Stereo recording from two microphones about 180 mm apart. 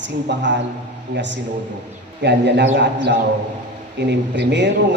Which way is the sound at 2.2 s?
75° right (ahead or behind).